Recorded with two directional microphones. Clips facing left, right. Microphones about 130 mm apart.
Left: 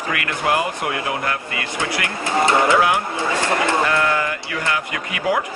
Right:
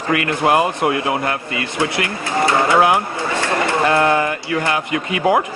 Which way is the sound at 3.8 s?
30° right (ahead or behind).